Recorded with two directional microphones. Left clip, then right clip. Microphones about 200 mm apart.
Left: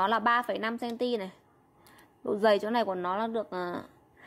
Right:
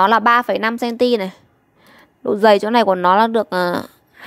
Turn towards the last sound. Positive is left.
turn(degrees=-40)  # may be behind; listen again after turning